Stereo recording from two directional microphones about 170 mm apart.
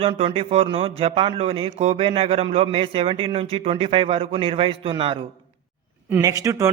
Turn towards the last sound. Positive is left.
turn(degrees=-20)  # may be behind; listen again after turning